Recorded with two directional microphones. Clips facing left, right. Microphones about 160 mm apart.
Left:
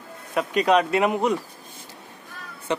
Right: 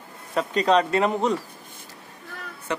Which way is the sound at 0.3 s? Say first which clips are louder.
Left 1 dB; 10° left (ahead or behind).